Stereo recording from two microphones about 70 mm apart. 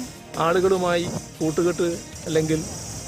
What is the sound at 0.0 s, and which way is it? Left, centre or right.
Speech, centre.